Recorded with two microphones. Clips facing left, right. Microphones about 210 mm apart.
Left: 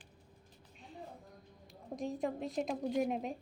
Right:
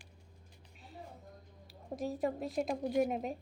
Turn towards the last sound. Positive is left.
turn(degrees=0)  # may be behind; listen again after turning